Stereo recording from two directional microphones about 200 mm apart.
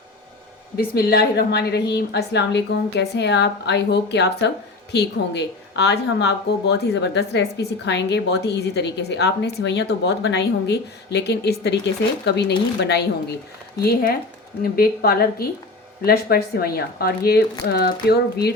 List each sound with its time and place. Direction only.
0.8 s a woman's voice: 50° left (ahead or behind)